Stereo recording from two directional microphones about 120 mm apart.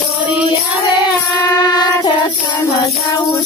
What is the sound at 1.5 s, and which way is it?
Music, 35° left (ahead or behind).